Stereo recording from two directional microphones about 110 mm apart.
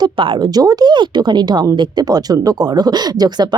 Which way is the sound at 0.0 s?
45° right (ahead or behind).